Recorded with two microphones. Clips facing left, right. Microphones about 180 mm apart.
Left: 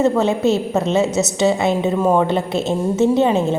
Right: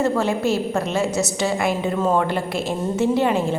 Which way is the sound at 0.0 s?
20° left (ahead or behind).